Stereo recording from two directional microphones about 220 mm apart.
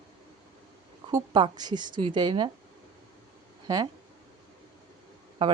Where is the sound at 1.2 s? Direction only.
20° right (ahead or behind).